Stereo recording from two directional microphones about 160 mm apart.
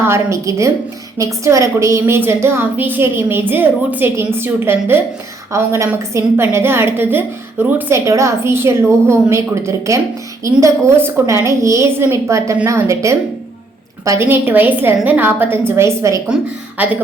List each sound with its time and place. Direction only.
0.0 s a woman's voice: 15° right (ahead or behind)